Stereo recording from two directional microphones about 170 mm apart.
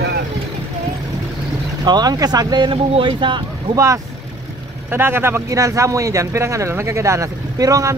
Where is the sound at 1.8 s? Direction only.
25° right (ahead or behind).